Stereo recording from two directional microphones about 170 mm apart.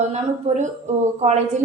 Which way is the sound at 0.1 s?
40° right (ahead or behind).